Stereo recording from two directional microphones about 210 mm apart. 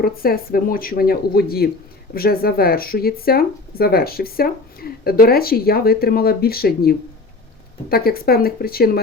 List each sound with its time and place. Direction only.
0.0 s speech: 45° left (ahead or behind)